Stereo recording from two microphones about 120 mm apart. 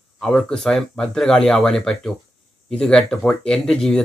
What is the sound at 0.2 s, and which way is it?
Speech, 5° left (ahead or behind).